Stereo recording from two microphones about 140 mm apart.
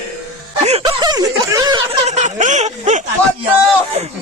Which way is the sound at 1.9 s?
55° right (ahead or behind).